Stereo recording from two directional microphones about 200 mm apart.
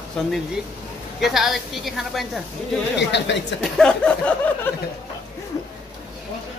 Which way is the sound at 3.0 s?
60° left (ahead or behind).